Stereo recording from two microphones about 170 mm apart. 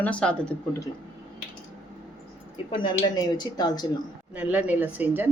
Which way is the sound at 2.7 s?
25° left (ahead or behind).